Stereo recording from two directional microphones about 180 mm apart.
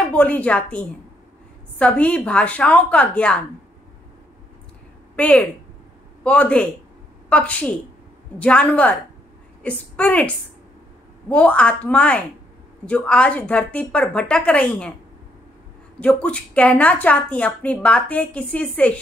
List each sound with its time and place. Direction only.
0.1 s a woman's voice: 10° left (ahead or behind)
5.1 s a woman's voice: 5° left (ahead or behind)
16.0 s a woman's voice: 5° left (ahead or behind)